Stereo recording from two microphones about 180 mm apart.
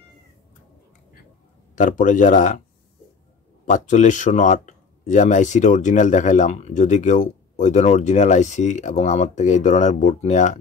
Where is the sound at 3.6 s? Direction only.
40° left (ahead or behind).